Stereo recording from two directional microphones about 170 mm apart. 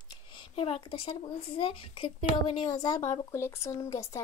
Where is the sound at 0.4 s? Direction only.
35° left (ahead or behind).